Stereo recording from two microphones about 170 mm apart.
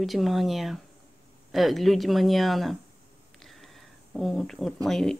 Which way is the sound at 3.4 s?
Centre (ahead or behind).